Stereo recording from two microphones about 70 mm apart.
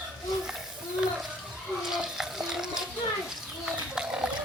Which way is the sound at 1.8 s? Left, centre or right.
Centre.